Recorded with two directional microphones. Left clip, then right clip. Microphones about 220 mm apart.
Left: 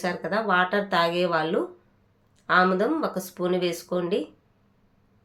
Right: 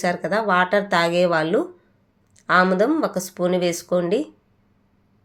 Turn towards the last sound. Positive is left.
turn(degrees=-25)  # may be behind; listen again after turning